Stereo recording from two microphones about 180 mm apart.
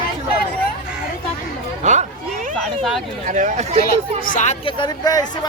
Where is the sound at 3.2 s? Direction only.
45° right (ahead or behind).